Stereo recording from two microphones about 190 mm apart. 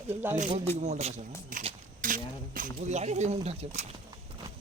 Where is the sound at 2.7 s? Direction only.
35° right (ahead or behind).